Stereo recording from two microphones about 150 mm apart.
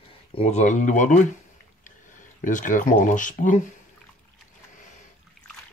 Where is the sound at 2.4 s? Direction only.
60° left (ahead or behind).